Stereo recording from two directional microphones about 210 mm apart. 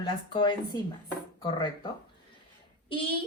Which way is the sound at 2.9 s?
25° left (ahead or behind).